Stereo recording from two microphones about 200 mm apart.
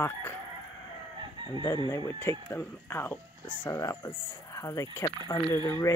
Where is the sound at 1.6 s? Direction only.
15° left (ahead or behind).